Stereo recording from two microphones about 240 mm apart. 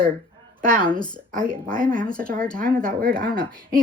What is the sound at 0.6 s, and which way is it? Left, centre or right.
A woman's voice, right.